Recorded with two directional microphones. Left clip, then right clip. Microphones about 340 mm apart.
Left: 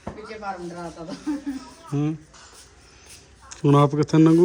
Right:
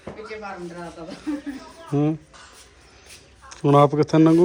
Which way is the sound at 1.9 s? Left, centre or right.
Centre.